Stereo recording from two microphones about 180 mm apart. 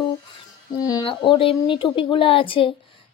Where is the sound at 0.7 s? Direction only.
20° left (ahead or behind).